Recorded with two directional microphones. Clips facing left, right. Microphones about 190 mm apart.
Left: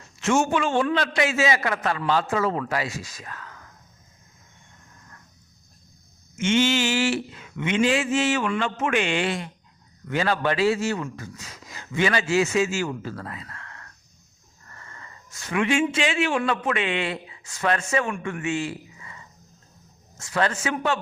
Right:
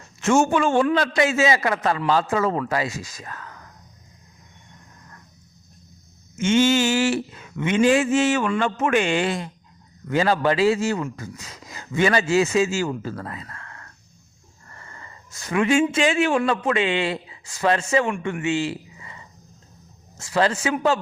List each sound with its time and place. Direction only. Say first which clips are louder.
0.2 s speech: right 3 dB; 45° right (ahead or behind)
1.6 s speech: right 3 dB; 30° right (ahead or behind)
6.4 s speech: right 3 dB; 40° right (ahead or behind)
14.7 s a sound: right 2 dB; 30° right (ahead or behind)
16.4 s a man's voice: right 3 dB; 30° right (ahead or behind)
20.3 s a man's voice: right 4 dB; 30° right (ahead or behind)